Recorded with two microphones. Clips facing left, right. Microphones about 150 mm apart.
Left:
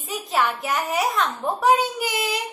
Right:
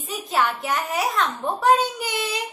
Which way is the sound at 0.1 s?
Centre (ahead or behind).